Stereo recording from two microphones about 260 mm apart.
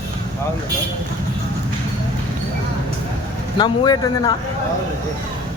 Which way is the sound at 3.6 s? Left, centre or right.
Centre.